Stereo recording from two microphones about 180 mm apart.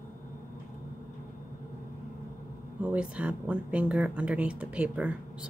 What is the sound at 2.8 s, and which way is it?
Speech, 5° right (ahead or behind).